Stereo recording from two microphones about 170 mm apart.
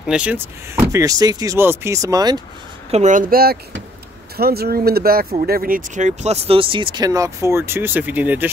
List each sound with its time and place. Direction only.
0.0 s speech: 5° right (ahead or behind); by 2.4 s 20° right (ahead or behind)
2.9 s speech: 45° right (ahead or behind); by 8.5 s 10° right (ahead or behind)